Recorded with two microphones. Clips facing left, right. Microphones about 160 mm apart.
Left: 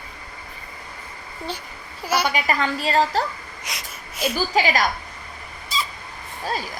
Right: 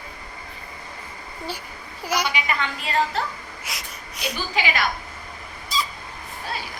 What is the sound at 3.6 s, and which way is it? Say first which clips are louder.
Wheeze: left 2 dB; centre (ahead or behind).